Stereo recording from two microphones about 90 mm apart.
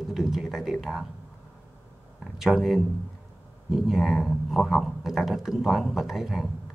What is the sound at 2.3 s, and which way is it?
Speech, 5° right (ahead or behind).